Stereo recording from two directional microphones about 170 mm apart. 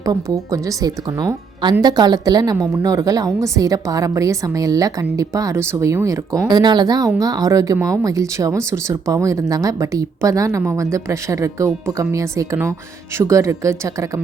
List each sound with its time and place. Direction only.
0.0 s speech: 20° right (ahead or behind)